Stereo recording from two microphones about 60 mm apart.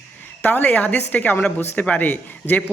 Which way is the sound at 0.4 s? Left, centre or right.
Left.